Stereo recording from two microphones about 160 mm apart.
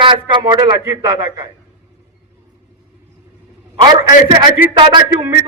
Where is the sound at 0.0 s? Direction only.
30° right (ahead or behind).